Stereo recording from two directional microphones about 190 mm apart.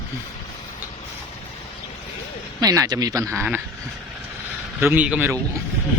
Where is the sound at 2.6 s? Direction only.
20° right (ahead or behind).